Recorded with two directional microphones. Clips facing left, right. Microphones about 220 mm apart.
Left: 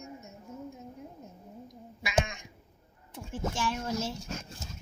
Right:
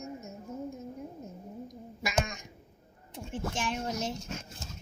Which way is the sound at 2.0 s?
40° right (ahead or behind).